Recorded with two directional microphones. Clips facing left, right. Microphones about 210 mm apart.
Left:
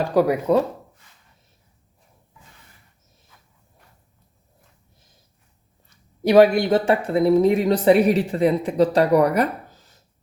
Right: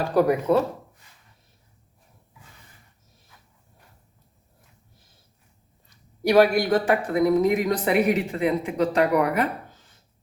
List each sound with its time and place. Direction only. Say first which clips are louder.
0.1 s speech: left 1 dB; 10° left (ahead or behind)
6.2 s speech: left 4 dB; 20° left (ahead or behind); by 9.5 s 40° left (ahead or behind)